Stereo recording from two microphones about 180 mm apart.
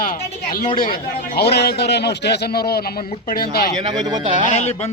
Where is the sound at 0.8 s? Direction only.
55° left (ahead or behind).